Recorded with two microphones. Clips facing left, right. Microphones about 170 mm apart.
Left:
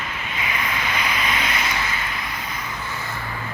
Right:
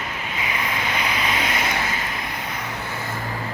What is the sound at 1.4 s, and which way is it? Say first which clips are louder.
Vehicle: right 1 dB; 40° right (ahead or behind).